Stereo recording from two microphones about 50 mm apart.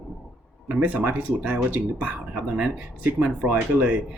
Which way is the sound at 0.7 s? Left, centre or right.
Right.